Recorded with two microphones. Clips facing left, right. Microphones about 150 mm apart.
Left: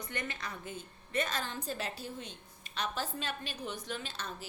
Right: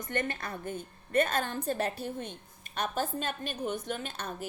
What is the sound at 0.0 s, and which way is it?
A woman's voice, 50° right (ahead or behind).